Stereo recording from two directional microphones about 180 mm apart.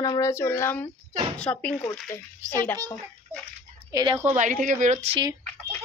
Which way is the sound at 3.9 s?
25° right (ahead or behind).